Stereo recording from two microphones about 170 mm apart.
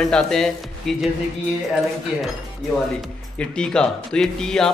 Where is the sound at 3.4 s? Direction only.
5° left (ahead or behind).